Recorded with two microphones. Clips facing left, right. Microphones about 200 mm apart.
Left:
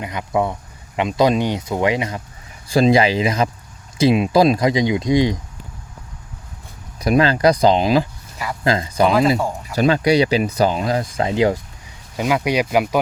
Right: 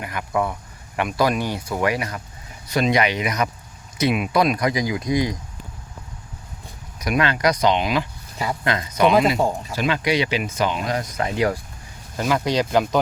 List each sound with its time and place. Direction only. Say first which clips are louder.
0.0 s speech: left 3 dB; 20° left (ahead or behind)
7.0 s speech: left 6 dB; 35° left (ahead or behind)
12.1 s speech: left 2 dB; 15° left (ahead or behind)